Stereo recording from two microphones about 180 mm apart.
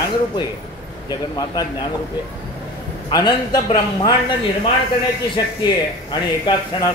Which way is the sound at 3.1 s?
20° left (ahead or behind).